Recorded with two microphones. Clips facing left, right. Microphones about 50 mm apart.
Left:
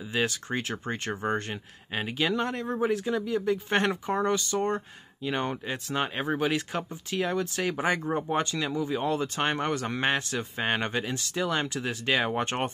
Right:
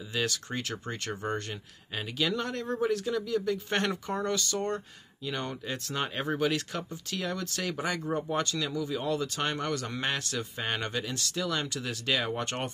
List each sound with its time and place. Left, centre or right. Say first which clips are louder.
0.1 s speech: left 3 dB; left
5.9 s speech: left 3 dB; centre
7.8 s speech: left 6 dB; left
8.2 s speech: left 2 dB; left